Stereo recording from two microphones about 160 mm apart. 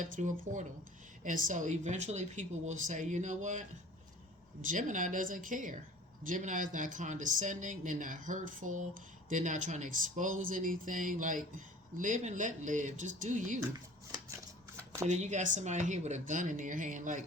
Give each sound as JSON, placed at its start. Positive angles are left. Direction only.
{"t": 0.0, "sound": "speech", "side_deg": -50}
{"t": 13.7, "sound": "shuffling cards", "side_deg": -25}
{"t": 15.0, "sound": "speech", "side_deg": -50}